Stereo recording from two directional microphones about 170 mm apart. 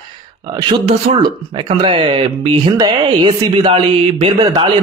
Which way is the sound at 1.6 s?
35° right (ahead or behind).